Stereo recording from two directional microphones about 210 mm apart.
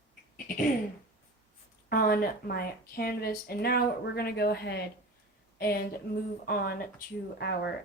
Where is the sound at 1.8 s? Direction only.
45° left (ahead or behind).